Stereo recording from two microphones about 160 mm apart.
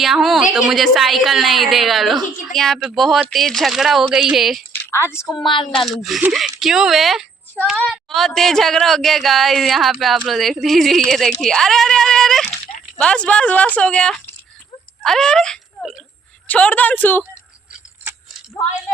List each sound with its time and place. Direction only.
0.0 s a woman's voice: centre (ahead or behind)
4.7 s a sound: 15° left (ahead or behind)
5.7 s a woman's voice: centre (ahead or behind)